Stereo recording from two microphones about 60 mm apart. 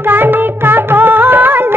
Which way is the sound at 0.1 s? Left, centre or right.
Right.